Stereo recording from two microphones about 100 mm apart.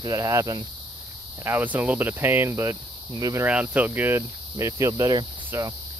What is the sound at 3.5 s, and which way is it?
Speech, 15° right (ahead or behind).